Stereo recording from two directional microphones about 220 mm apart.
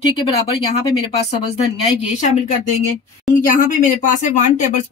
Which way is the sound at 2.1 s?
35° left (ahead or behind).